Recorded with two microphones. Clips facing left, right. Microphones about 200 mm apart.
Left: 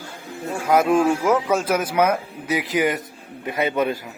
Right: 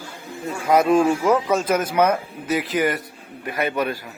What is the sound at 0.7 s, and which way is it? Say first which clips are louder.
A man's voice: right 1 dB; centre (ahead or behind).